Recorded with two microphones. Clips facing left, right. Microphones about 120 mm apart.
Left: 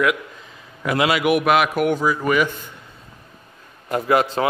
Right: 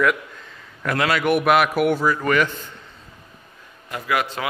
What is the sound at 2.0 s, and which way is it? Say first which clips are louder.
Speech: left 1 dB; 10° left (ahead or behind).